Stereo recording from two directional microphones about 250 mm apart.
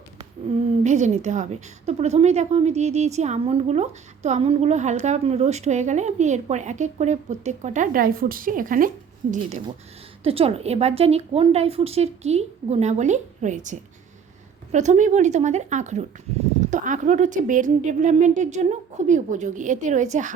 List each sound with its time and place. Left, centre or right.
0.9 s a woman's voice: right
10.2 s a woman's voice: right